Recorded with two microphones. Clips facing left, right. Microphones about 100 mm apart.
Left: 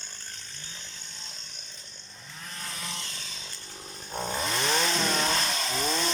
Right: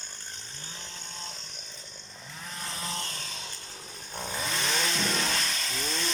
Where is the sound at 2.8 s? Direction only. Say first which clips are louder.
Right 3 dB; 40° right (ahead or behind).